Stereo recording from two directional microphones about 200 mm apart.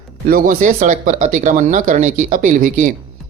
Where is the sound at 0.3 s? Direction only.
45° right (ahead or behind).